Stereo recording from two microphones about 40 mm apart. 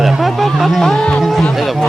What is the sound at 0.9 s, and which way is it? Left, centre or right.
Speech, left.